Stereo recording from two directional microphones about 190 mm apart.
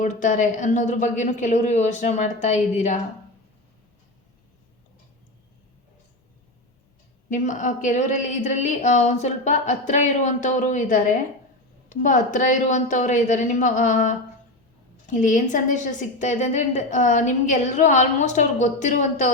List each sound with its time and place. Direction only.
0.0 s a woman's voice: 40° left (ahead or behind)
7.3 s a woman's voice: 40° left (ahead or behind)